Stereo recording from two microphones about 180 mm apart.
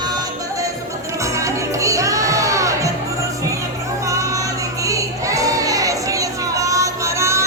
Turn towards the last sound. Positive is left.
turn(degrees=-15)  # may be behind; listen again after turning